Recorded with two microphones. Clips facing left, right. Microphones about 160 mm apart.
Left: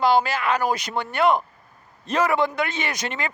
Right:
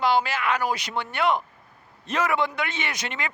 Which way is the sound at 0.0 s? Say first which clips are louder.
Left 3 dB; 40° left (ahead or behind).